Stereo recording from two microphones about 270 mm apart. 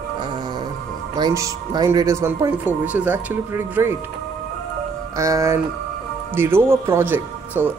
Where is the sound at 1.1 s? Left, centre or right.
Centre.